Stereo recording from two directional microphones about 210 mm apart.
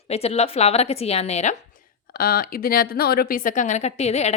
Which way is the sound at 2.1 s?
45° left (ahead or behind).